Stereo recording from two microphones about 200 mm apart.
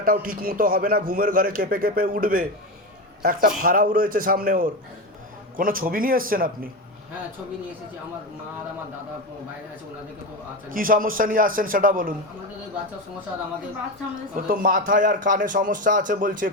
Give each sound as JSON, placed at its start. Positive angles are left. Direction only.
{"t": 0.0, "sound": "a man's voice", "side_deg": -45}
{"t": 10.7, "sound": "a man's voice", "side_deg": -45}
{"t": 14.2, "sound": "a man's voice", "side_deg": -45}